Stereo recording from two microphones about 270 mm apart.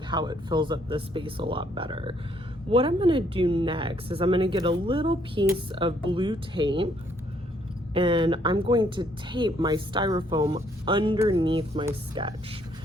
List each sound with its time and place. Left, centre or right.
0.1 s speech: centre
7.9 s speech: centre